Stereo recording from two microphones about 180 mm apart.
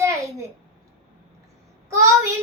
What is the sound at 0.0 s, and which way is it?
Babbling, 15° right (ahead or behind).